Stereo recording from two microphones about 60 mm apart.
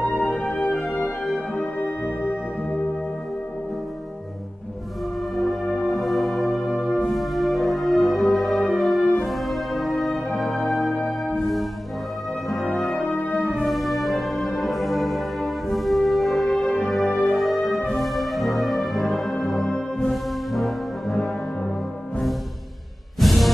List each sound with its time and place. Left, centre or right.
0.2 s music: centre
5.3 s music: centre
12.9 s music: centre
13.6 s music: centre
19.3 s brass instrument: centre
23.2 s music: centre